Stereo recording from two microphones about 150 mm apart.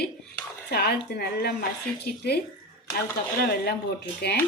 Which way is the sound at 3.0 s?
90° left.